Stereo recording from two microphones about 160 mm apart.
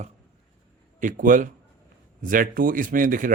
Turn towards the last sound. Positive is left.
turn(degrees=-55)  # may be behind; listen again after turning